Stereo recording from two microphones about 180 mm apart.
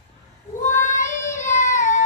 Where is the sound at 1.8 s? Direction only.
40° left (ahead or behind).